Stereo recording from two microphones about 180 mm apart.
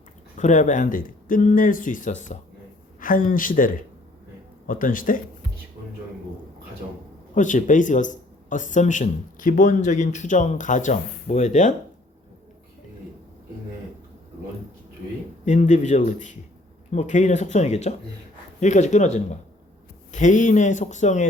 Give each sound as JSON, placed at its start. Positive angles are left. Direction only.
{"t": 0.3, "sound": "a man's voice", "side_deg": 45}
{"t": 7.3, "sound": "a man's voice", "side_deg": 45}
{"t": 15.4, "sound": "a man's voice", "side_deg": 40}